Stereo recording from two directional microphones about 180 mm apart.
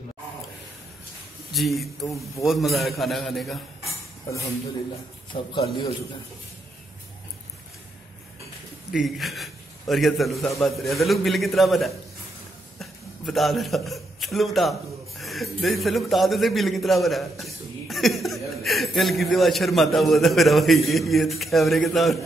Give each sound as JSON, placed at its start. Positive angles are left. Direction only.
{"t": 1.5, "sound": "a man's voice", "side_deg": 0}
{"t": 5.3, "sound": "a man's voice", "side_deg": 25}
{"t": 8.9, "sound": "a man's voice", "side_deg": 0}